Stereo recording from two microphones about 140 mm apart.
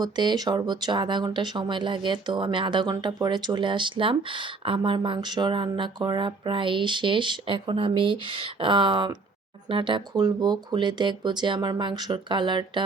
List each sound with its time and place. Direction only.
0.0 s speech: 30° right (ahead or behind)